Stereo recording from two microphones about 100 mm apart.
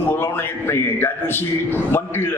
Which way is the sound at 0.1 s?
25° left (ahead or behind).